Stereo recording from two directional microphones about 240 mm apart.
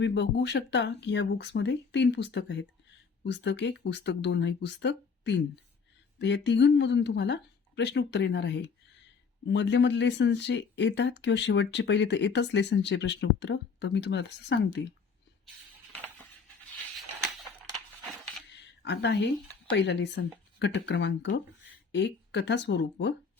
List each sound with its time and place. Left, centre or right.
0.0 s speech: left
17.4 s a sound: centre
18.8 s speech: left